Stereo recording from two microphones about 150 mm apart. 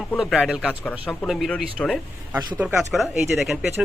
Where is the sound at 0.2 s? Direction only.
5° right (ahead or behind).